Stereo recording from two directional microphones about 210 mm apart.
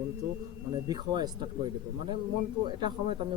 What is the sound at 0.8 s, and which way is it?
A man's voice, 20° right (ahead or behind).